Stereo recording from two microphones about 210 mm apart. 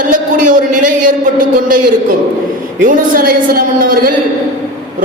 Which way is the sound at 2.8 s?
40° right (ahead or behind).